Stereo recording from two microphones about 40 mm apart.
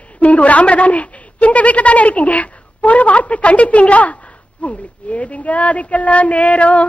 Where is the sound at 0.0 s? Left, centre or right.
Left.